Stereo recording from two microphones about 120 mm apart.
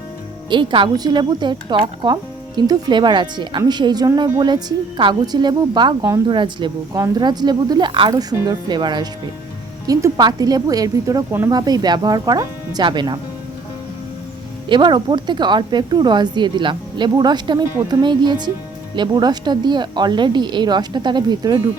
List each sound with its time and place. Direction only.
0.5 s speech: 45° right (ahead or behind)
8.1 s speech: 30° right (ahead or behind)
14.7 s speech: 40° right (ahead or behind)